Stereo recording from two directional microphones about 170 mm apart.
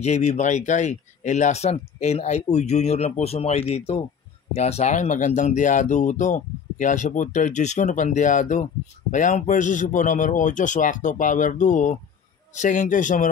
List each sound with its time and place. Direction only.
0.0 s speech: 40° left (ahead or behind)